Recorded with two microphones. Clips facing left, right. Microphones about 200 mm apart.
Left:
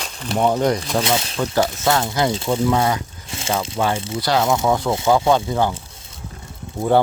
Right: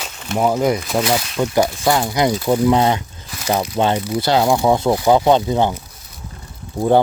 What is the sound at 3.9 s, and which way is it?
Speech, 25° left (ahead or behind).